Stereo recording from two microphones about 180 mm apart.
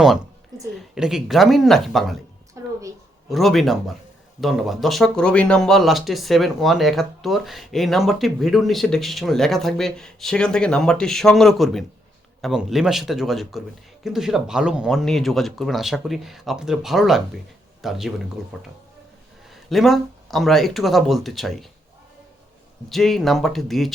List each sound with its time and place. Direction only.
0.5 s a sound: 20° right (ahead or behind)
0.9 s speech: 5° right (ahead or behind)
2.6 s a sound: 20° right (ahead or behind)
3.2 s speech: centre (ahead or behind)
19.7 s speech: centre (ahead or behind)
22.9 s speech: centre (ahead or behind)